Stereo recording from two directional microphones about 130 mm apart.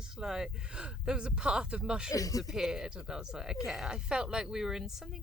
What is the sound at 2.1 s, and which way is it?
Speech, 25° left (ahead or behind).